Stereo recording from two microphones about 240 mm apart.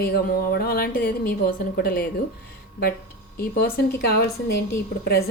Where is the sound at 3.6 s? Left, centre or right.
Left.